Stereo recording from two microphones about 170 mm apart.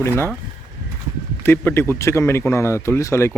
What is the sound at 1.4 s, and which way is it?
Speech, 15° left (ahead or behind).